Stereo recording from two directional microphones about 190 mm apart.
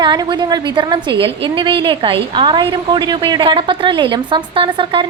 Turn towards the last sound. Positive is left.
turn(degrees=-25)  # may be behind; listen again after turning